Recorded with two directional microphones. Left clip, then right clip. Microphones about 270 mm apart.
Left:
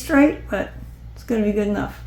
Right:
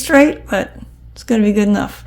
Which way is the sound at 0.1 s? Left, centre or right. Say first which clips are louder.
Right 6 dB; right.